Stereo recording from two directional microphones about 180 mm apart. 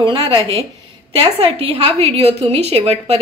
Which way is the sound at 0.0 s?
30° right (ahead or behind).